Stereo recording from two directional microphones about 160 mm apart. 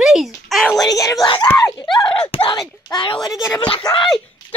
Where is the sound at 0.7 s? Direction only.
20° left (ahead or behind).